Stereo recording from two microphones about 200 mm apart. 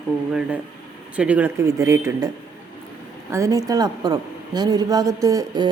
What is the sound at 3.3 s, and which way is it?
A man's voice, 15° right (ahead or behind).